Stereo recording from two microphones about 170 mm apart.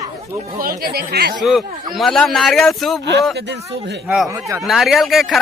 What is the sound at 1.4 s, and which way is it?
Speech, centre (ahead or behind).